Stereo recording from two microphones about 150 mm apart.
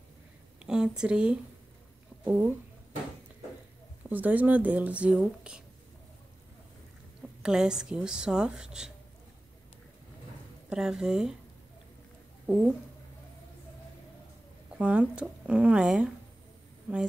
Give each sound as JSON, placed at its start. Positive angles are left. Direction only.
{"t": 0.7, "sound": "a woman's voice", "side_deg": -5}
{"t": 2.2, "sound": "speech", "side_deg": -15}
{"t": 4.1, "sound": "speech", "side_deg": -10}
{"t": 7.4, "sound": "a woman's voice", "side_deg": -5}
{"t": 10.7, "sound": "a woman's voice", "side_deg": -5}
{"t": 12.4, "sound": "speech", "side_deg": -5}
{"t": 14.8, "sound": "speech", "side_deg": -5}